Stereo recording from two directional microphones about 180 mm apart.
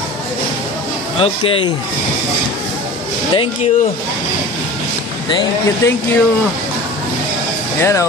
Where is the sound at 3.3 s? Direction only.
30° left (ahead or behind).